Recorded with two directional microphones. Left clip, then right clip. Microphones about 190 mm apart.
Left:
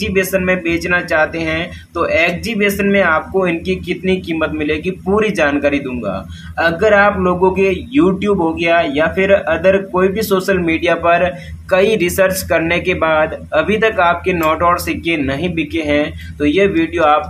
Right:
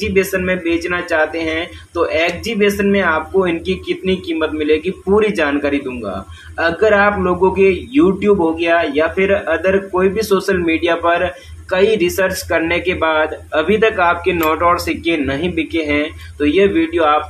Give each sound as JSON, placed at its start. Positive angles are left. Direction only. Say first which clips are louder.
{"t": 0.0, "sound": "a man's voice", "louder": "left 1 dB", "side_deg": 10}